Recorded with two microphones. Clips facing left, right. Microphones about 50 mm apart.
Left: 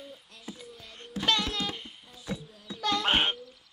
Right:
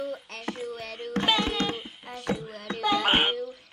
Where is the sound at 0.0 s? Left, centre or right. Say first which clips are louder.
Right 12 dB; right.